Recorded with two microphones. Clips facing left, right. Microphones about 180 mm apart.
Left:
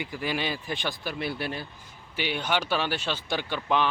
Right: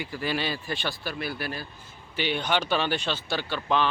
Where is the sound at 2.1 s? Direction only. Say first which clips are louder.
Right 1 dB; 10° left (ahead or behind).